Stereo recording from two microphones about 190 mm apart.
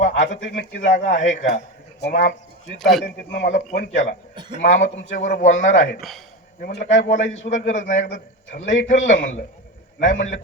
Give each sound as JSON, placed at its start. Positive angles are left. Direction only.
{"t": 0.0, "sound": "a sound", "side_deg": 40}
{"t": 0.7, "sound": "a man's voice", "side_deg": 40}
{"t": 2.7, "sound": "a man's voice", "side_deg": 0}
{"t": 3.7, "sound": "a man's voice", "side_deg": 40}
{"t": 6.0, "sound": "a man's voice", "side_deg": 0}
{"t": 6.6, "sound": "a man's voice", "side_deg": 55}
{"t": 6.9, "sound": "a man's voice", "side_deg": 40}